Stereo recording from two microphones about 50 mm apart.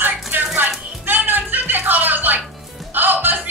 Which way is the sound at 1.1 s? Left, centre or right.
Right.